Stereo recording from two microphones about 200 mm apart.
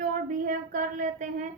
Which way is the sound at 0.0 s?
40° right (ahead or behind).